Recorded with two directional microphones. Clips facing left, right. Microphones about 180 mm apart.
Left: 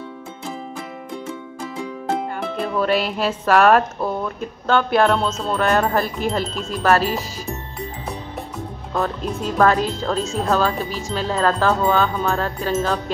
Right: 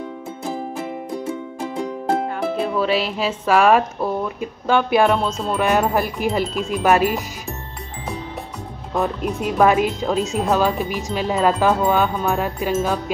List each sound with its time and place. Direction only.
2.0 s speech: 5° right (ahead or behind)
8.9 s speech: 15° right (ahead or behind)